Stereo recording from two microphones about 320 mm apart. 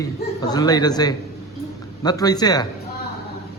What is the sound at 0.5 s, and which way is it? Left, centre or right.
A man's voice, centre.